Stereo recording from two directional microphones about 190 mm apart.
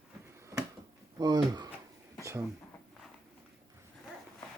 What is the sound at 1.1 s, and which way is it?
Speech, 20° right (ahead or behind).